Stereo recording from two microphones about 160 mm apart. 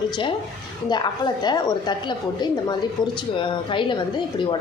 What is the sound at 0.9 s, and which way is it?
A woman's voice, 25° left (ahead or behind).